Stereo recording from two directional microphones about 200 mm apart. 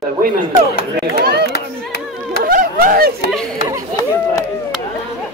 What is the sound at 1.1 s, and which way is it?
Speech, 50° right (ahead or behind).